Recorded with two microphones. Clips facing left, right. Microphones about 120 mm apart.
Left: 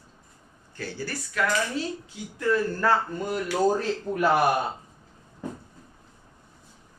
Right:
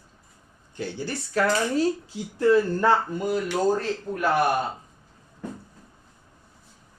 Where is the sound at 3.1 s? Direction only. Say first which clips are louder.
Right 3 dB; centre (ahead or behind).